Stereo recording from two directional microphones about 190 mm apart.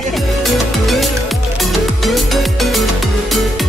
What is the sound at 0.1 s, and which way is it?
Music, centre (ahead or behind).